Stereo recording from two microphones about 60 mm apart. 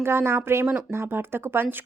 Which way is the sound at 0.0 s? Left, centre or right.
Right.